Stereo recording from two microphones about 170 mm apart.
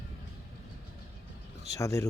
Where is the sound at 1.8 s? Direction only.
20° left (ahead or behind).